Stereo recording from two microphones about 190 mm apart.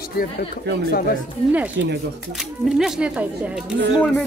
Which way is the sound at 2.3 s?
Centre (ahead or behind).